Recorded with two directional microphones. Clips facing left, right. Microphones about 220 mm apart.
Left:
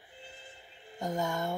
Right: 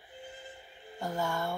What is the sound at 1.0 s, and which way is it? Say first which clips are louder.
Speech: left 1 dB; 20° left (ahead or behind).